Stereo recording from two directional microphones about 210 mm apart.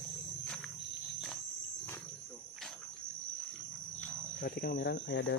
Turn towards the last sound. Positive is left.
turn(degrees=55)  # may be behind; listen again after turning